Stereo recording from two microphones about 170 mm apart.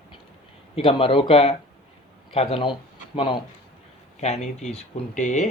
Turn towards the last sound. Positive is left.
turn(degrees=45)  # may be behind; listen again after turning